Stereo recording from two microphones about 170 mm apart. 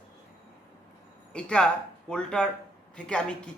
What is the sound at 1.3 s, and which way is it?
Speech, 5° left (ahead or behind).